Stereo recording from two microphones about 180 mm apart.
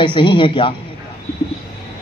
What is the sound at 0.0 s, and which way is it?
Speech, 25° left (ahead or behind).